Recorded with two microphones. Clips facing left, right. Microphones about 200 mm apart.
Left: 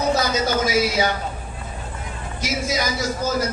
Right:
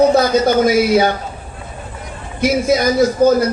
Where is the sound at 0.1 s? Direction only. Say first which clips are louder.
Right 8 dB; 55° right (ahead or behind).